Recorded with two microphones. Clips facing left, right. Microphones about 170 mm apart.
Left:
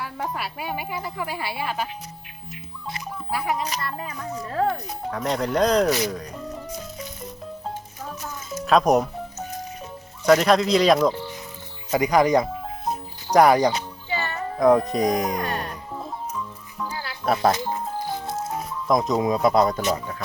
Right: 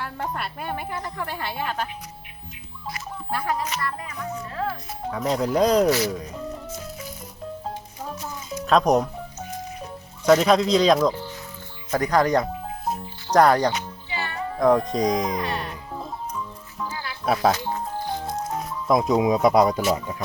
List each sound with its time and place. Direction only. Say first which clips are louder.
0.0 s a woman's voice: even; 5° left (ahead or behind)
3.2 s a woman's voice: even; 10° left (ahead or behind)
3.8 s a child's voice: even; 30° left (ahead or behind)
4.5 s music: left 7 dB; 45° left (ahead or behind)
5.1 s speech: right 1 dB; centre (ahead or behind)
6.1 s music: right 1 dB; centre (ahead or behind)
8.6 s speech: left 1 dB; 5° left (ahead or behind)
10.2 s a woman's voice: even; centre (ahead or behind)
15.4 s music: even; 45° left (ahead or behind)
16.9 s music: left 1 dB; 30° left (ahead or behind)
17.2 s speech: even; centre (ahead or behind)